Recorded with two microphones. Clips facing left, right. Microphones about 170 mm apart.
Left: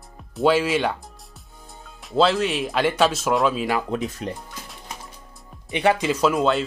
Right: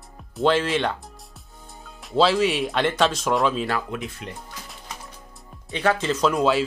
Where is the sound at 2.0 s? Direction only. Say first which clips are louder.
Even; centre (ahead or behind).